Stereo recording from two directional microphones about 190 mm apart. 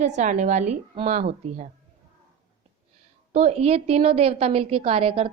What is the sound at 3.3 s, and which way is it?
A woman's voice, 35° right (ahead or behind).